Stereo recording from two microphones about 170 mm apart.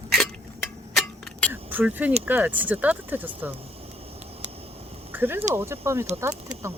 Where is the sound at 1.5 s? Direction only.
10° right (ahead or behind).